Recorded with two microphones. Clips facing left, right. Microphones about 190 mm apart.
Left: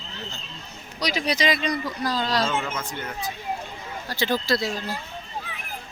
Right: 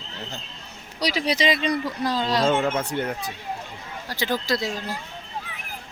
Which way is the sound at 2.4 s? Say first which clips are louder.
Right 5 dB; 55° right (ahead or behind).